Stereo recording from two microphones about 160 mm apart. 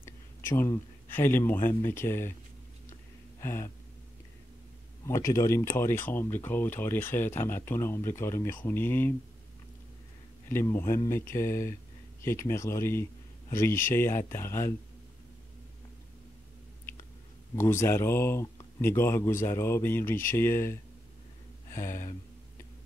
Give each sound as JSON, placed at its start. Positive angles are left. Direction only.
{"t": 0.0, "sound": "speech", "side_deg": 15}
{"t": 3.3, "sound": "a sound", "side_deg": 15}
{"t": 5.0, "sound": "speech", "side_deg": 20}
{"t": 10.5, "sound": "speech", "side_deg": 15}
{"t": 17.6, "sound": "speech", "side_deg": 15}